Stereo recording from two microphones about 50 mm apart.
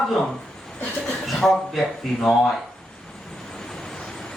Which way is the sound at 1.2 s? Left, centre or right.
Centre.